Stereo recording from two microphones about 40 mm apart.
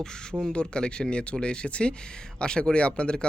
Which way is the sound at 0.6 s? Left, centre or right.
Left.